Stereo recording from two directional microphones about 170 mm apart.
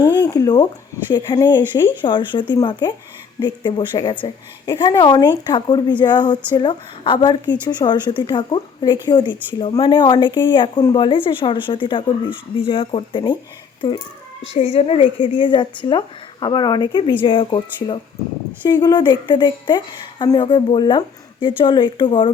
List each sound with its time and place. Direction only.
0.2 s speech: 25° left (ahead or behind)
14.5 s speech: 40° left (ahead or behind)
18.7 s speech: 25° left (ahead or behind)